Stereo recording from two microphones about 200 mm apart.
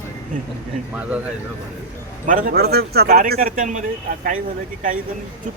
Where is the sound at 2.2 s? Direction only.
45° right (ahead or behind).